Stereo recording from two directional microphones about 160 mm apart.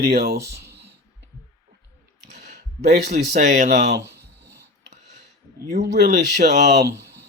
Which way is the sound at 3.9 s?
90° right.